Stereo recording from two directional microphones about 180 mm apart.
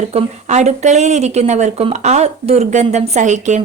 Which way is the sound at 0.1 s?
40° right (ahead or behind).